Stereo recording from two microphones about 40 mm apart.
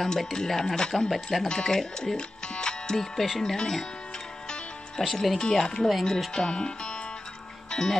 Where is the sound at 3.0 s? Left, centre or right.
Centre.